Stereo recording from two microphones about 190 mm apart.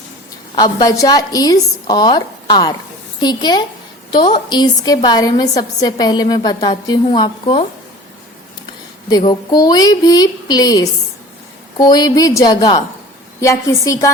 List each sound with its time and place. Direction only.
0.5 s a woman's voice: 20° left (ahead or behind)
9.0 s a woman's voice: 20° left (ahead or behind)